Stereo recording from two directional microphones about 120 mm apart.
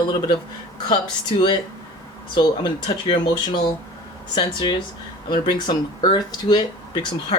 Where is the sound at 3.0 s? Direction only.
40° left (ahead or behind).